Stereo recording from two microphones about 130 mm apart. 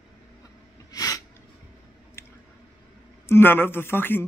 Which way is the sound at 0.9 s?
25° left (ahead or behind).